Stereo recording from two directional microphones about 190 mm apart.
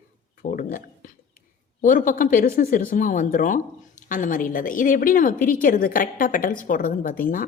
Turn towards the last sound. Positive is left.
turn(degrees=45)  # may be behind; listen again after turning